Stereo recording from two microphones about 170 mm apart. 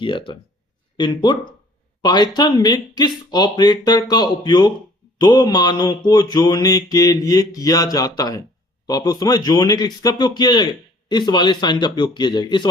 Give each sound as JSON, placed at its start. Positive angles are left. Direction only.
{"t": 0.0, "sound": "a man's voice", "side_deg": 30}